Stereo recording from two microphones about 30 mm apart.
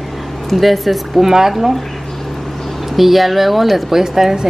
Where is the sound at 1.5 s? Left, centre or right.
Centre.